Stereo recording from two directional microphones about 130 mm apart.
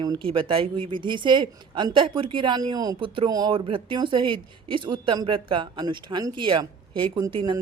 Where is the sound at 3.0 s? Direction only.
40° right (ahead or behind).